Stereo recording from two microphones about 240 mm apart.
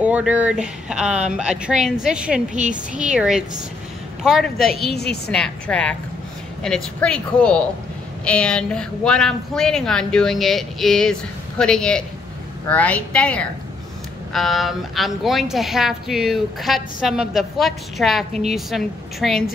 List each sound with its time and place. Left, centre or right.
0.0 s a woman's voice: centre
2.5 s speech: right
3.0 s a woman's voice: centre
4.9 s a woman's voice: left
5.3 s a woman's voice: centre